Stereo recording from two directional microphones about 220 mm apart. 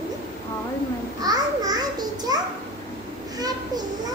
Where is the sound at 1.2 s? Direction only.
15° right (ahead or behind).